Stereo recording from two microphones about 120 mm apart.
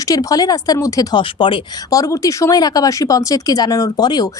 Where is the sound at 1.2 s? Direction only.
45° left (ahead or behind).